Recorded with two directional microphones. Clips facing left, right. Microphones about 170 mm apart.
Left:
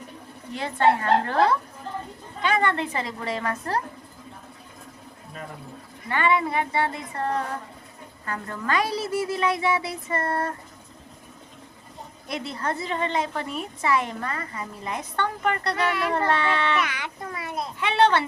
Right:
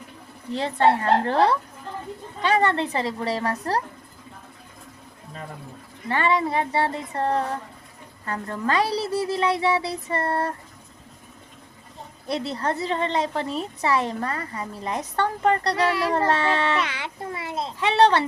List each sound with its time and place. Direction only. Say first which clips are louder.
0.5 s speech: right 1 dB; 30° right (ahead or behind)
6.1 s speech: right 1 dB; 35° right (ahead or behind)
12.3 s speech: right 4 dB; 35° right (ahead or behind)